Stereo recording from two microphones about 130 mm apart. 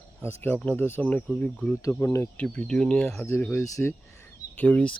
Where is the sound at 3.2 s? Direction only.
15° left (ahead or behind).